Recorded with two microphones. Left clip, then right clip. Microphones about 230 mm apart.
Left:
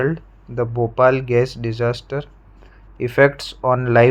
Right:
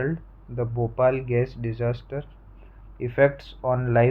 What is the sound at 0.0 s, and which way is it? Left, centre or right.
Speech, left.